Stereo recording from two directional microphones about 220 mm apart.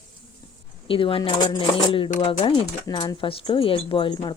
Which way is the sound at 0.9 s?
25° left (ahead or behind).